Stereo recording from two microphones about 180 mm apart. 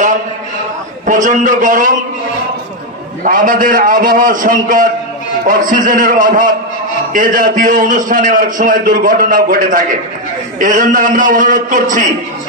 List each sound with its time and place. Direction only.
1.0 s a man's voice: 45° right (ahead or behind)
3.3 s a man's voice: 50° right (ahead or behind)